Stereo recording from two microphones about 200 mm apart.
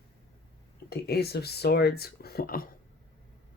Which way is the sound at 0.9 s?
55° left (ahead or behind).